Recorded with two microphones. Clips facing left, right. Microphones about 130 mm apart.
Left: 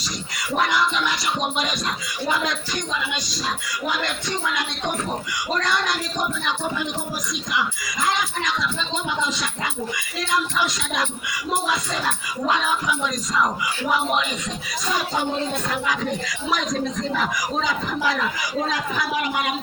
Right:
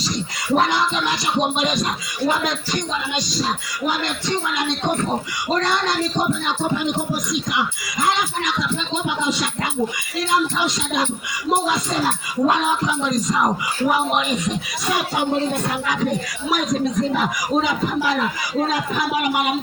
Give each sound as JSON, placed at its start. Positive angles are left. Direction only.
{"t": 0.5, "sound": "speech", "side_deg": -25}
{"t": 5.6, "sound": "speech", "side_deg": -25}
{"t": 9.0, "sound": "music", "side_deg": -20}
{"t": 10.3, "sound": "speech", "side_deg": -25}
{"t": 15.9, "sound": "music", "side_deg": -15}
{"t": 17.2, "sound": "speech", "side_deg": -20}